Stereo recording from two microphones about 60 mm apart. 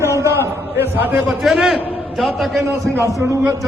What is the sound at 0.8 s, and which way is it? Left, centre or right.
Speech, right.